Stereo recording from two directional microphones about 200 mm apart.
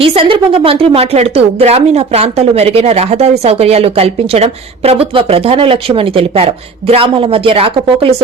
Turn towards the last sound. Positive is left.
turn(degrees=-25)  # may be behind; listen again after turning